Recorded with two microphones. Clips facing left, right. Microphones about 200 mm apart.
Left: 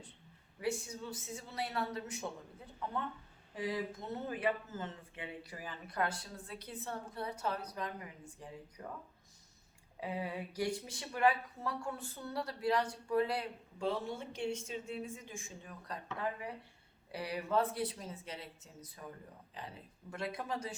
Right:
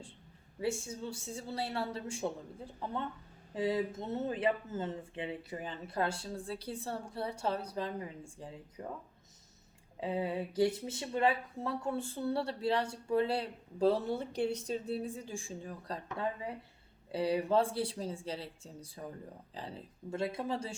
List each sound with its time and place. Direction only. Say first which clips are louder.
0.6 s speech: right 2 dB; 25° right (ahead or behind)
10.0 s speech: right 5 dB; 25° right (ahead or behind)